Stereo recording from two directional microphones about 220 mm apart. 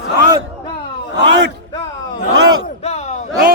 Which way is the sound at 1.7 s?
20° left (ahead or behind).